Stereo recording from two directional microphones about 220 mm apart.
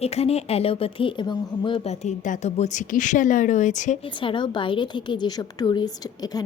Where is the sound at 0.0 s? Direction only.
30° left (ahead or behind).